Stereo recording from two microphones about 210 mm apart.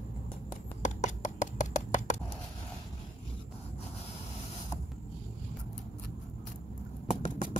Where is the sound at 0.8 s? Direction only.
35° left (ahead or behind).